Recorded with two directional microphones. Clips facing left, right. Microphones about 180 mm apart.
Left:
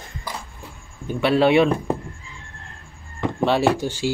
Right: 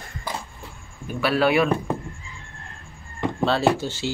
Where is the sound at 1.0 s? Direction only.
25° left (ahead or behind).